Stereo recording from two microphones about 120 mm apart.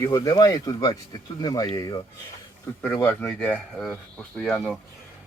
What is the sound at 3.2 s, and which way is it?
Speech, 10° left (ahead or behind).